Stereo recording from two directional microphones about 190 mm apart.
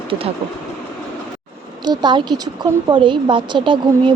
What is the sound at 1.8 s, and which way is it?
A woman's voice, 20° right (ahead or behind).